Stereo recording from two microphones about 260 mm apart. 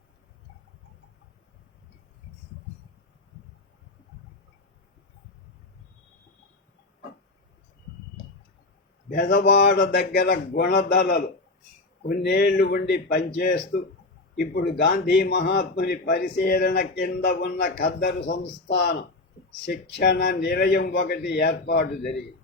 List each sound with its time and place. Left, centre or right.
9.0 s a man's voice: left